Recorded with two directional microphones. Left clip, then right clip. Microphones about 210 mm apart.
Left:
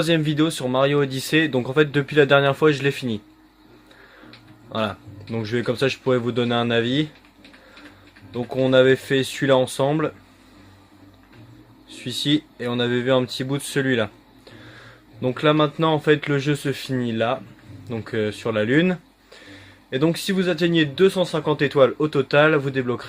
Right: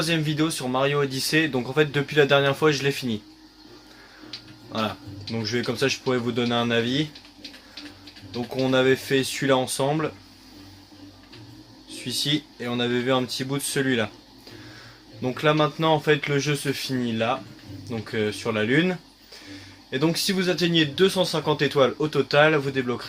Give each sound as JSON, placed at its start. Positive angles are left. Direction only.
{"t": 0.0, "sound": "speech", "side_deg": 50}
{"t": 5.3, "sound": "speech", "side_deg": 45}
{"t": 8.3, "sound": "speech", "side_deg": 40}
{"t": 11.9, "sound": "speech", "side_deg": 45}
{"t": 15.2, "sound": "speech", "side_deg": 45}